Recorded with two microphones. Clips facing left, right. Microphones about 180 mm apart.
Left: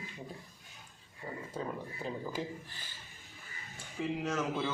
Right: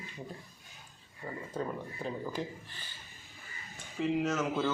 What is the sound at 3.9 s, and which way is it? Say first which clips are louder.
Speech: right 4 dB; 5° right (ahead or behind).